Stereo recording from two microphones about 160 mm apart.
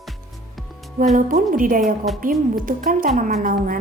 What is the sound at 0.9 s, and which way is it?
Speech, 55° right (ahead or behind).